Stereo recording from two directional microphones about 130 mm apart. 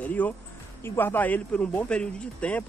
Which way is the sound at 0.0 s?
10° left (ahead or behind).